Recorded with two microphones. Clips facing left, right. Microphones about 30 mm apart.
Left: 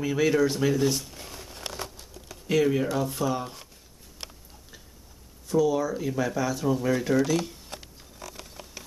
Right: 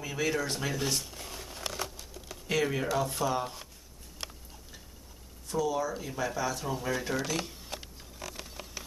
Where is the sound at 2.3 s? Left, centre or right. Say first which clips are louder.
Left 6 dB; centre.